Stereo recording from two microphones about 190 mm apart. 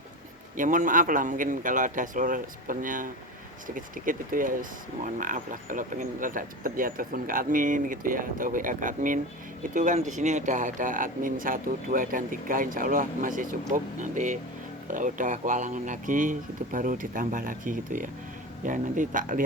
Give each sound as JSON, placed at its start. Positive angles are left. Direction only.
{"t": 0.5, "sound": "speech", "side_deg": -45}